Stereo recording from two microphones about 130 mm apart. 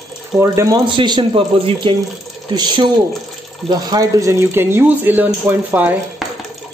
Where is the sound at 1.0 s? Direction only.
35° right (ahead or behind); by 6.0 s 10° right (ahead or behind).